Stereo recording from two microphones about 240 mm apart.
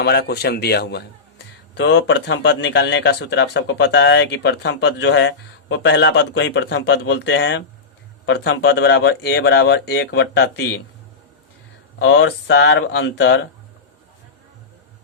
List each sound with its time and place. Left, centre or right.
0.0 s a man's voice: left
11.9 s a man's voice: left